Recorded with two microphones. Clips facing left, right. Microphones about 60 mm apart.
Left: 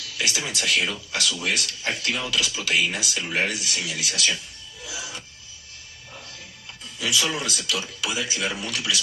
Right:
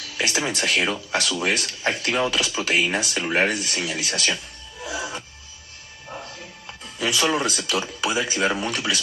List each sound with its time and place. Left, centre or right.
0.2 s speech: right
4.8 s music: right
7.0 s speech: right